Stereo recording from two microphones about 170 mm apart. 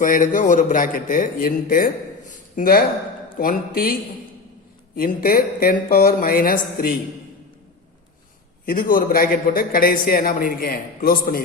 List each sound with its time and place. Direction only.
0.0 s a man's voice: 50° left (ahead or behind)
4.9 s a man's voice: 55° left (ahead or behind)
8.6 s a man's voice: 55° left (ahead or behind)